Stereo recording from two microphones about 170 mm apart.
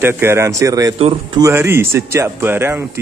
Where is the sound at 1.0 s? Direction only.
30° right (ahead or behind).